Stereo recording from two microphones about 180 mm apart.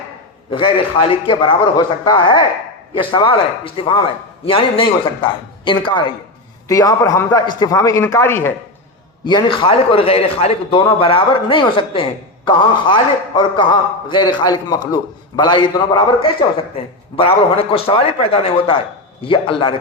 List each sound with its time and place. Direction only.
0.5 s a man's voice: 30° left (ahead or behind); by 8.5 s 15° left (ahead or behind)
9.2 s a man's voice: 25° left (ahead or behind)